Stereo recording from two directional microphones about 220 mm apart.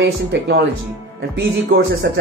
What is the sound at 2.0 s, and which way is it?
Speech, 50° right (ahead or behind).